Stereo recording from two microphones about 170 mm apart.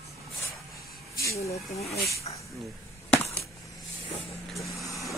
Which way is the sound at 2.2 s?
35° left (ahead or behind).